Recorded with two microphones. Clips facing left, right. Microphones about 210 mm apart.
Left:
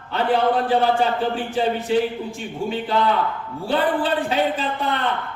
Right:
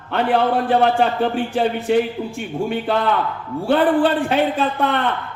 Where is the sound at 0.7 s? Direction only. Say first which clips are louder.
Right 2 dB; 60° right (ahead or behind).